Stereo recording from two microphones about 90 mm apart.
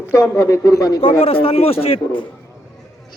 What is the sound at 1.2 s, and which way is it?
Speech, 90° left.